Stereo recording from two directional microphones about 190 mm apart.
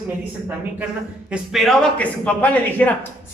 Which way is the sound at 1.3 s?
Centre (ahead or behind).